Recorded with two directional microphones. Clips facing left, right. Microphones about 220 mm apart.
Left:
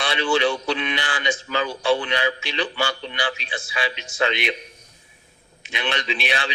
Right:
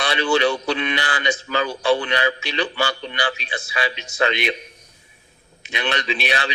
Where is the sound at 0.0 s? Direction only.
40° right (ahead or behind).